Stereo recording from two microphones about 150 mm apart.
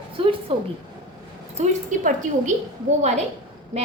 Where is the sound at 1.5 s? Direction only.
55° right (ahead or behind).